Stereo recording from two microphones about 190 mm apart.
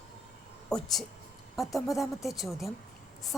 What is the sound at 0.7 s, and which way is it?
Speech, centre (ahead or behind).